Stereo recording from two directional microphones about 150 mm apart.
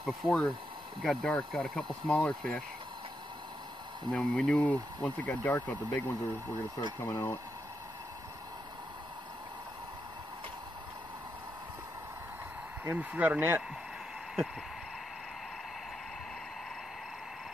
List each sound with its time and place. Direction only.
0.0 s speech: 5° left (ahead or behind)
4.1 s speech: 5° left (ahead or behind)
12.8 s speech: 15° right (ahead or behind)